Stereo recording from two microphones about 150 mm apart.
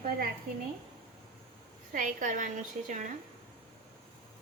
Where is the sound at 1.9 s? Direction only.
60° right (ahead or behind).